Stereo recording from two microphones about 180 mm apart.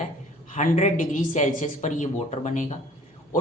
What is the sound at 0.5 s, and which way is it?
A woman's voice, 45° left (ahead or behind).